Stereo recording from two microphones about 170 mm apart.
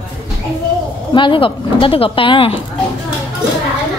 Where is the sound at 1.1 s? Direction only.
30° left (ahead or behind).